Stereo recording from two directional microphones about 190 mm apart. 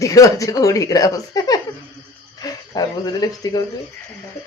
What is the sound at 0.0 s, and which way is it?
Speech, 15° left (ahead or behind).